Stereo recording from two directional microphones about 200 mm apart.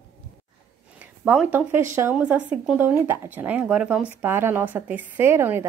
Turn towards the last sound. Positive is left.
turn(degrees=-10)  # may be behind; listen again after turning